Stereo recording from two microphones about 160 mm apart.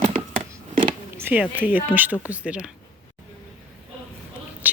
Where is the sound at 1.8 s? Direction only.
10° right (ahead or behind).